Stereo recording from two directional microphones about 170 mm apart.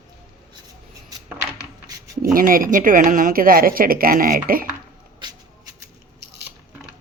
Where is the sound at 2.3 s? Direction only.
55° right (ahead or behind).